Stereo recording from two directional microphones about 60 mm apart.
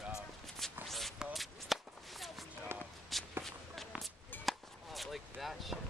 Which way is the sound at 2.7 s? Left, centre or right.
Right.